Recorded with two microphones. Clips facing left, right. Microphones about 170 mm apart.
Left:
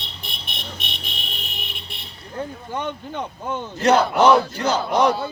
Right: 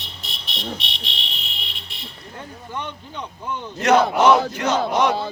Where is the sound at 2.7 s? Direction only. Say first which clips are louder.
Left 5 dB; 45° left (ahead or behind).